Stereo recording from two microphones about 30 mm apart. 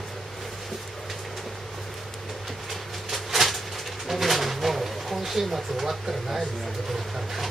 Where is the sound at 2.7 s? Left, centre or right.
Centre.